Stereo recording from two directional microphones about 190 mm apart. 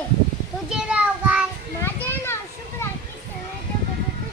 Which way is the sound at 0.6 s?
5° right (ahead or behind).